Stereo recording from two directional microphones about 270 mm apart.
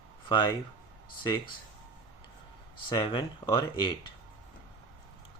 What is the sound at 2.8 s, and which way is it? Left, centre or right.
Speech, centre.